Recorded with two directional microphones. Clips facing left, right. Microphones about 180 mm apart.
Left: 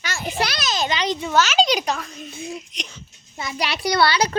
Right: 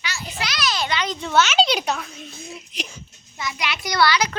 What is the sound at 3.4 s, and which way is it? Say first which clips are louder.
Speech: left 3 dB; 30° left (ahead or behind).